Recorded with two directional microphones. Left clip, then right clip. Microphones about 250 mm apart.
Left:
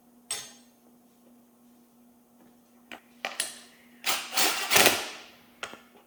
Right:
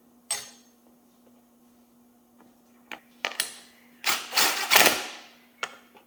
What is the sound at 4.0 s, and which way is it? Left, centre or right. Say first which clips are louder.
Engine: right 3 dB; centre.